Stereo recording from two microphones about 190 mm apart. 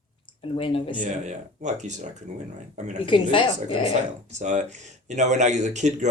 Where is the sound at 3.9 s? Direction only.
40° right (ahead or behind).